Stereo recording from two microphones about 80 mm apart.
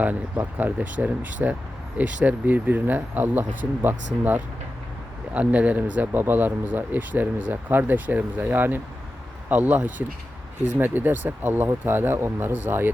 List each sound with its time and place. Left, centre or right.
0.0 s speech: right